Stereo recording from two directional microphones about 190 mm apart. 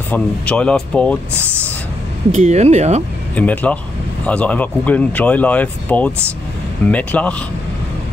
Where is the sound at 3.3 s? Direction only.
10° left (ahead or behind).